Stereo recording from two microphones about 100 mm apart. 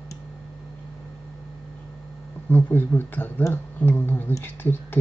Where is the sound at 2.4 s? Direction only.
20° left (ahead or behind).